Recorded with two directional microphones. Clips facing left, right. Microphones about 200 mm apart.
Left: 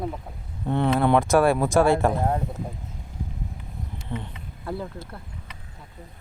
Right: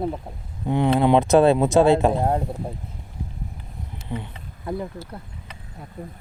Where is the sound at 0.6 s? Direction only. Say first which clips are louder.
Right 3 dB; 15° right (ahead or behind).